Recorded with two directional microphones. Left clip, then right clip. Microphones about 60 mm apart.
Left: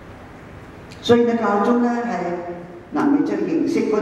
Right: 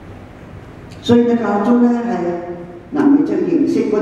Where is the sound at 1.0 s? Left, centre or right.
Left.